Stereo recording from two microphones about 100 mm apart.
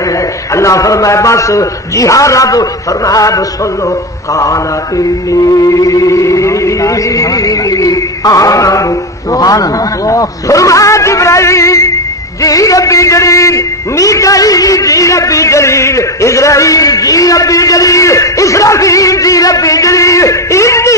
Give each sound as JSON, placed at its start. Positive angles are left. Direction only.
{"t": 0.6, "sound": "a man's voice", "side_deg": 35}
{"t": 4.4, "sound": "a man's voice", "side_deg": 35}